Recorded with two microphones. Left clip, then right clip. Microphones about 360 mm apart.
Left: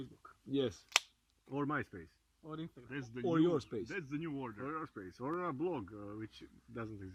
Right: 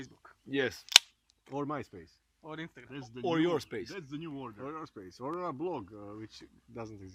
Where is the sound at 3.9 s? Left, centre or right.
Centre.